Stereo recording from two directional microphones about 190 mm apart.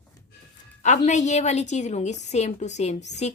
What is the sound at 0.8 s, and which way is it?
Speech, 40° left (ahead or behind).